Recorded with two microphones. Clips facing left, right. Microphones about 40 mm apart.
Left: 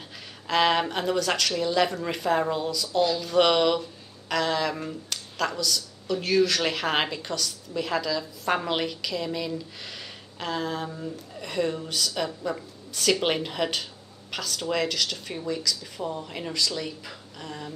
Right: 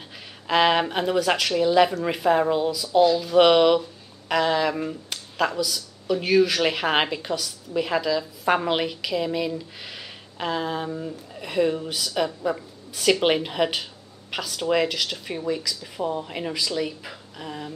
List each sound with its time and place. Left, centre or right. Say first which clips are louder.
0.5 s speech: right 3 dB; centre